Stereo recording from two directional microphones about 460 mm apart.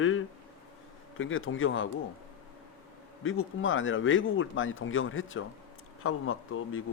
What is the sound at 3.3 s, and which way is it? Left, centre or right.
Speech, left.